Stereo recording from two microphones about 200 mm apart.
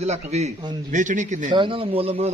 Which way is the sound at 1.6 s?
25° right (ahead or behind).